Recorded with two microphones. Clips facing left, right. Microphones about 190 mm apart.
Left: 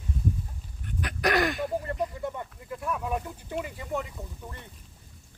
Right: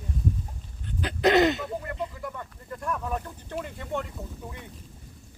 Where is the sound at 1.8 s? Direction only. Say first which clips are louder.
Left 3 dB; 30° left (ahead or behind).